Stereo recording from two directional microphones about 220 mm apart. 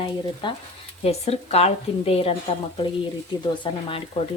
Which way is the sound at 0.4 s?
20° left (ahead or behind).